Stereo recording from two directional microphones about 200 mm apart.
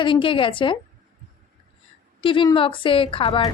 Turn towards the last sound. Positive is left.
turn(degrees=25)  # may be behind; listen again after turning